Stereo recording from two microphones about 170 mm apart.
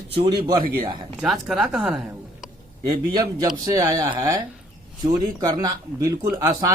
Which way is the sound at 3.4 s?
20° right (ahead or behind).